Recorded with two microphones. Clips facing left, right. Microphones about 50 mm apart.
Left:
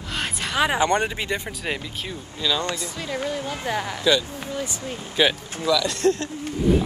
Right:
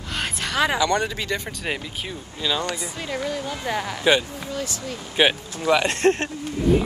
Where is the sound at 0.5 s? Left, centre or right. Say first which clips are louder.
Even; centre.